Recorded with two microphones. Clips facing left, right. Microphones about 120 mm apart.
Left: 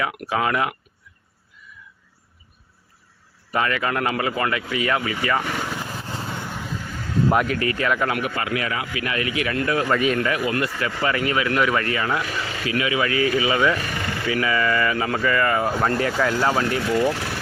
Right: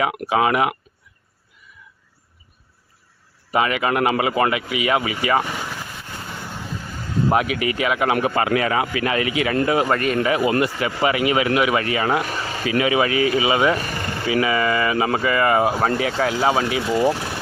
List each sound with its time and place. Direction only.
0.3 s a man's voice: 15° right (ahead or behind)
3.5 s a man's voice: 15° right (ahead or behind)
7.3 s a man's voice: 5° right (ahead or behind)
8.1 s speech: 30° right (ahead or behind)
9.9 s speech: centre (ahead or behind)
10.2 s a man's voice: 20° right (ahead or behind)
11.9 s speech: 25° right (ahead or behind)
12.2 s speech: 40° right (ahead or behind); by 13.7 s 20° right (ahead or behind)
13.7 s a sound: 40° right (ahead or behind)
14.3 s speech: 20° right (ahead or behind)
15.9 s a man's voice: 5° right (ahead or behind)
16.8 s speech: 20° right (ahead or behind)